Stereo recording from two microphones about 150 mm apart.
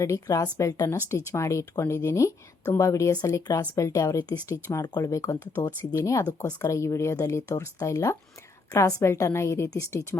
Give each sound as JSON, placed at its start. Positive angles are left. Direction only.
{"t": 0.0, "sound": "speech", "side_deg": 20}